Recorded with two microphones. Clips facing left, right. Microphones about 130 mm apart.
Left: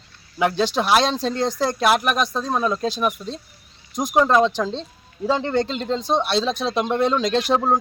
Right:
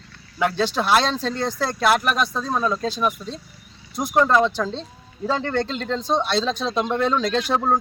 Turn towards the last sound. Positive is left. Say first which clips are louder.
# left 2 dB
turn(degrees=15)  # may be behind; listen again after turning